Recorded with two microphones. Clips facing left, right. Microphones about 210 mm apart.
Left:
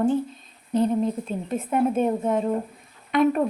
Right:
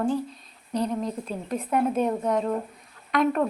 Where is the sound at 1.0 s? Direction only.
5° left (ahead or behind).